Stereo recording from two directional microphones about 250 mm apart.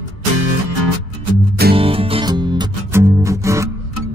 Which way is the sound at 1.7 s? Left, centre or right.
Right.